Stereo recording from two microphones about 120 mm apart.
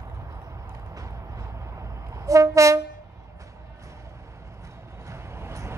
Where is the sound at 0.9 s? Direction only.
25° right (ahead or behind).